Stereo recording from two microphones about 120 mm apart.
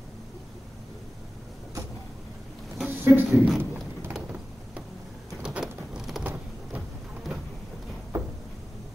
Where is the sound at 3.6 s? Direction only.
15° right (ahead or behind).